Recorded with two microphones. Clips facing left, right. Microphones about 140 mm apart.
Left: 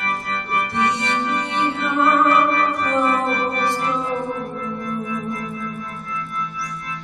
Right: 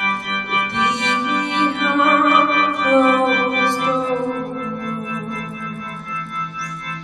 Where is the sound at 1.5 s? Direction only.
75° right (ahead or behind).